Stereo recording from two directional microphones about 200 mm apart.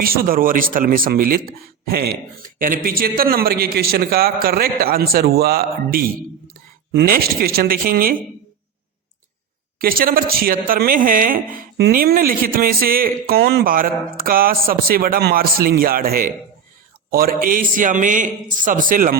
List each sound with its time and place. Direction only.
0.0 s a woman's voice: 45° right (ahead or behind)
9.7 s a woman's voice: 45° right (ahead or behind)